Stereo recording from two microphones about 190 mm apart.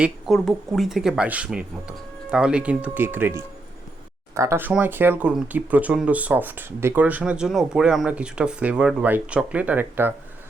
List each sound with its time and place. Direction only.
0.0 s speech: centre (ahead or behind)